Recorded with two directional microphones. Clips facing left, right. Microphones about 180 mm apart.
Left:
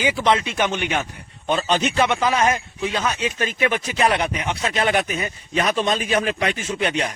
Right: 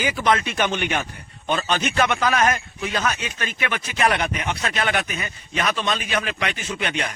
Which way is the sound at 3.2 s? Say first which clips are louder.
Left 7 dB; 30° left (ahead or behind).